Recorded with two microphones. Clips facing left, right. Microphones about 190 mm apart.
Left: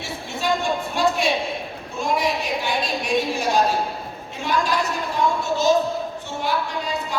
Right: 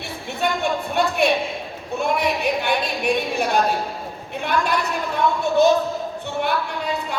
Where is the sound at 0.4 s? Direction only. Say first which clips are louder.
Right 1 dB; 60° right (ahead or behind).